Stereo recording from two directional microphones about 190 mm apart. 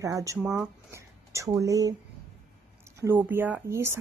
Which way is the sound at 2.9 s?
10° right (ahead or behind).